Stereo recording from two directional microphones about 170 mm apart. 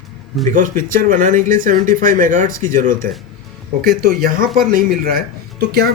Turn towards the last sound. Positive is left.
turn(degrees=-70)  # may be behind; listen again after turning